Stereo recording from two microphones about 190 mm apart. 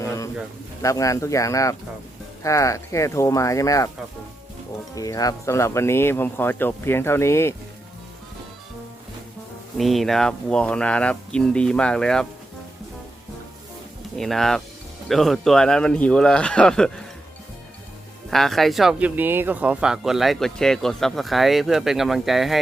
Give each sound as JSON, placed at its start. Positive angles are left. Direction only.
{"t": 0.0, "sound": "bird", "side_deg": 15}
{"t": 0.8, "sound": "speech", "side_deg": 15}
{"t": 4.9, "sound": "speech", "side_deg": 20}
{"t": 9.7, "sound": "speech", "side_deg": 0}
{"t": 14.2, "sound": "speech", "side_deg": 0}
{"t": 18.3, "sound": "speech", "side_deg": 0}